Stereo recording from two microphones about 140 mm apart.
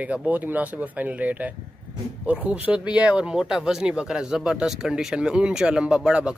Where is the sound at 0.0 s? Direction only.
10° right (ahead or behind).